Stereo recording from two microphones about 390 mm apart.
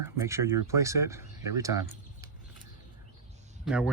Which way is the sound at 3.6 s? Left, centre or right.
Centre.